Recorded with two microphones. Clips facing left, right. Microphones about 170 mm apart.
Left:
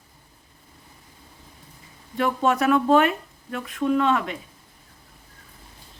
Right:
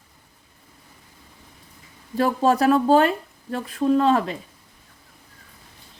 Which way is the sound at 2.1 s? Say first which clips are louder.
Right 3 dB; 35° right (ahead or behind).